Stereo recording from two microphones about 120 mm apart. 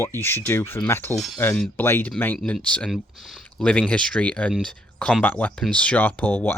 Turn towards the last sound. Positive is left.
turn(degrees=15)  # may be behind; listen again after turning